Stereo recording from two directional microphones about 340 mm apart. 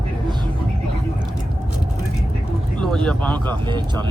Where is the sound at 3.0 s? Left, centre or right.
Centre.